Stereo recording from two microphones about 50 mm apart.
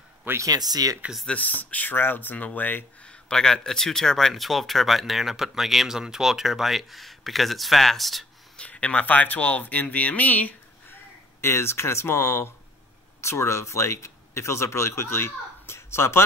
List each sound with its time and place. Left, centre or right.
0.3 s speech: right
1.3 s speech: left
3.0 s a sound: left
3.3 s speech: centre
8.5 s speech: left
11.4 s speech: left